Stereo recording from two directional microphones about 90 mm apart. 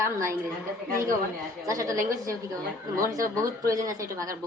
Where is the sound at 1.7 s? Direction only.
35° right (ahead or behind).